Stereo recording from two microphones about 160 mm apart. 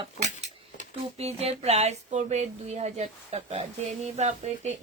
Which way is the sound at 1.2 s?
40° right (ahead or behind).